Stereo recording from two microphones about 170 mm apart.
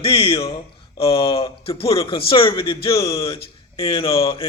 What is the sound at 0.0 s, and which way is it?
Speech, 35° left (ahead or behind).